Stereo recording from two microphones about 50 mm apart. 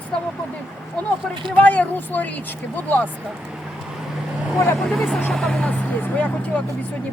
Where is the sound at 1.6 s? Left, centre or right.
Left.